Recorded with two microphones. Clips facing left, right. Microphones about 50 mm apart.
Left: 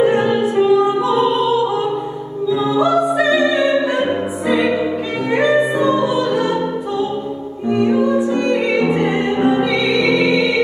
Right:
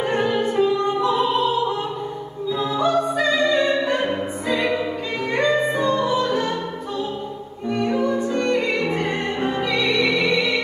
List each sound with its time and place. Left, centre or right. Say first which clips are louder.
0.0 s opera: left 6 dB; centre
5.3 s music: left 5 dB; centre